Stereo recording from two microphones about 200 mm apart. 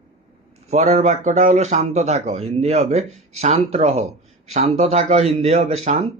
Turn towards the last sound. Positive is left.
turn(degrees=-35)  # may be behind; listen again after turning